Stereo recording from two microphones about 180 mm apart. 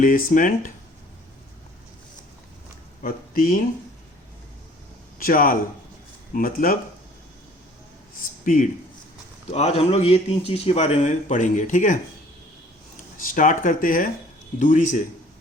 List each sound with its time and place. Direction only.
0.0 s speech: 50° left (ahead or behind)
3.0 s speech: 50° left (ahead or behind)
5.2 s speech: 50° left (ahead or behind)
9.5 s a man's voice: 35° left (ahead or behind)
13.2 s speech: 50° left (ahead or behind)